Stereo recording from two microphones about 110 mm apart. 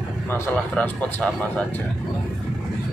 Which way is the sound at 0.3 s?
15° left (ahead or behind).